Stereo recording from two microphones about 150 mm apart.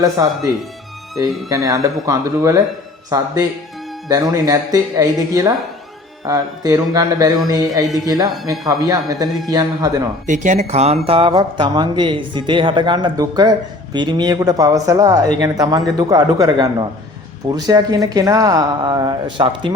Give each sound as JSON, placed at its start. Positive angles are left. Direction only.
{"t": 0.0, "sound": "speech", "side_deg": -25}
{"t": 10.2, "sound": "speech", "side_deg": -55}